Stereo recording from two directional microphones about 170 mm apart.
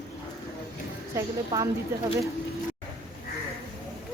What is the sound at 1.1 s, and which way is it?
Speech, 20° right (ahead or behind).